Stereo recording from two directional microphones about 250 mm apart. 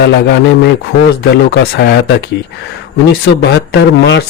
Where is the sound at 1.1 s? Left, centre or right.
Left.